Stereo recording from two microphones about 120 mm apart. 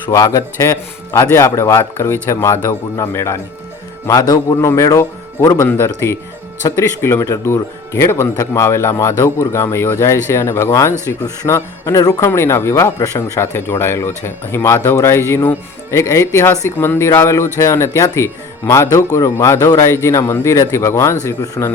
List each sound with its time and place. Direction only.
0.1 s speech: 25° left (ahead or behind)